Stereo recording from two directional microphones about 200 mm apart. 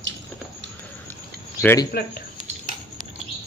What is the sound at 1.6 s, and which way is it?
Speech, 15° left (ahead or behind).